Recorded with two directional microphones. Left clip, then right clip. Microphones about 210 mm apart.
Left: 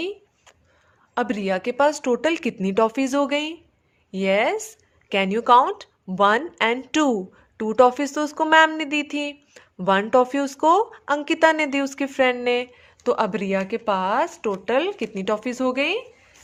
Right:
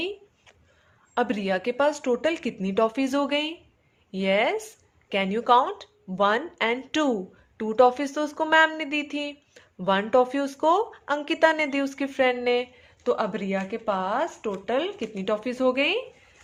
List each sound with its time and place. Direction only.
1.1 s speech: 25° left (ahead or behind)